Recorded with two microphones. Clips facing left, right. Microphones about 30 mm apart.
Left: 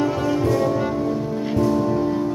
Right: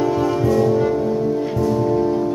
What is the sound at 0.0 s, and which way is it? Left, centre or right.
Music, centre.